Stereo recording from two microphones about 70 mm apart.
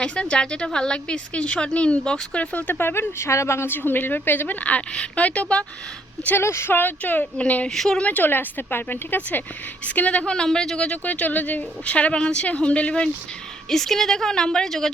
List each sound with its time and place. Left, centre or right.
0.0 s a woman's voice: centre
6.2 s speech: left
6.7 s a woman's voice: left
7.7 s a woman's voice: centre
8.0 s a woman's voice: left
13.7 s a woman's voice: centre